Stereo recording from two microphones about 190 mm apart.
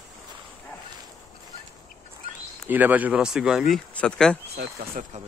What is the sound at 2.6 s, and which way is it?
Speech, 10° right (ahead or behind).